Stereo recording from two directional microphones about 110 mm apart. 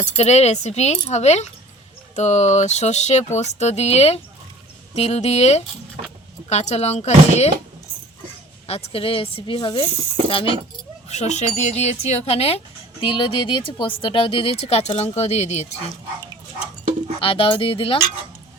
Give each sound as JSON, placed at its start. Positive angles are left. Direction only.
{"t": 0.0, "sound": "speech", "side_deg": 85}
{"t": 4.9, "sound": "speech", "side_deg": 85}
{"t": 8.6, "sound": "a woman's voice", "side_deg": 65}
{"t": 11.1, "sound": "speech", "side_deg": 85}
{"t": 17.2, "sound": "a woman's voice", "side_deg": 55}